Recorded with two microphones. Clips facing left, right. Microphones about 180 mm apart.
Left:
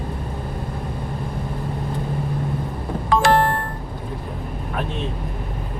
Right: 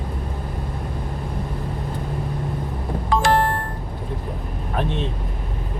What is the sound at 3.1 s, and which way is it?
Music, 70° left (ahead or behind).